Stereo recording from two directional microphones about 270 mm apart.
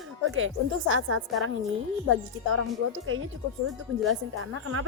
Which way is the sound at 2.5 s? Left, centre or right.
Right.